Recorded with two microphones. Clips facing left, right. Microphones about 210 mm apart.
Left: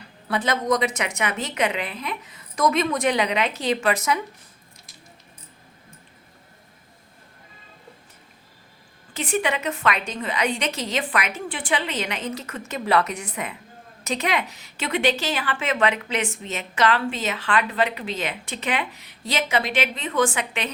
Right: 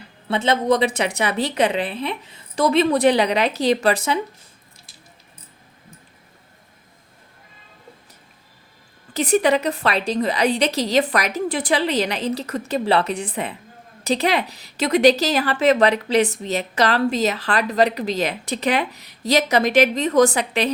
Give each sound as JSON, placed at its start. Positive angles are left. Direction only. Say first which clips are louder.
{"t": 0.3, "sound": "a woman's voice", "louder": "right 4 dB", "side_deg": -25}
{"t": 9.1, "sound": "a woman's voice", "louder": "right 7 dB", "side_deg": -40}